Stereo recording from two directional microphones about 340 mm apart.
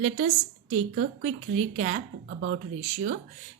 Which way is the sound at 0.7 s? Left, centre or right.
Right.